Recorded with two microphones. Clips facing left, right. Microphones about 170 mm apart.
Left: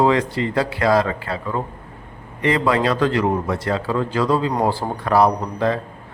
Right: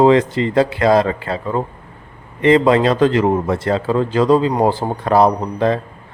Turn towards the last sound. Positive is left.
turn(degrees=-25)  # may be behind; listen again after turning